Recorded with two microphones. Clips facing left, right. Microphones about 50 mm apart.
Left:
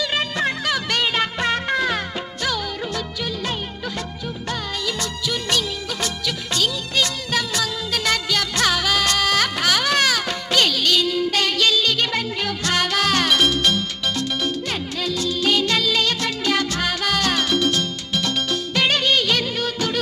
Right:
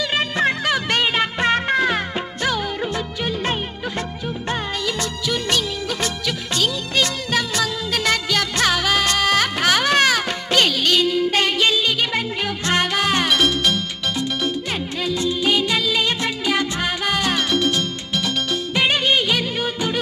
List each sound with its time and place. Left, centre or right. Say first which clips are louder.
0.0 s music: right 2 dB; centre
15.0 s music: right 1 dB; centre
18.8 s music of bollywood: right 1 dB; centre